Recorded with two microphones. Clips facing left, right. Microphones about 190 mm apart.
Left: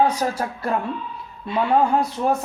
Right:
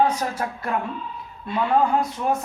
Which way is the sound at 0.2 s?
35° left (ahead or behind).